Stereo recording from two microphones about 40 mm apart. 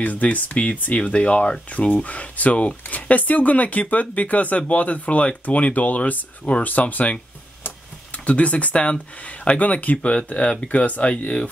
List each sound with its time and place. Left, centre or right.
0.0 s speech: left
1.0 s speech: left
8.3 s speech: left